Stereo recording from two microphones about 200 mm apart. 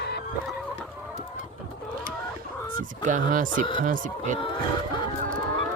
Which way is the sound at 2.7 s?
40° right (ahead or behind).